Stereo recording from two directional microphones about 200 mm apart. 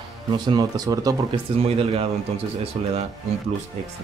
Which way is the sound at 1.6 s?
30° right (ahead or behind).